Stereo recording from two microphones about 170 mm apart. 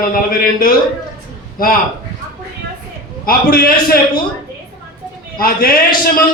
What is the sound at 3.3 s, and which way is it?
Speech, 60° left (ahead or behind).